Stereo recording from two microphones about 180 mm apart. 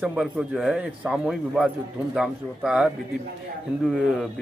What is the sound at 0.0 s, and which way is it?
Speech, 5° right (ahead or behind).